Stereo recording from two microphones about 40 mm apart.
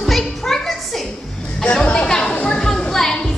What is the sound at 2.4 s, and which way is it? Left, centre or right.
Speech, centre.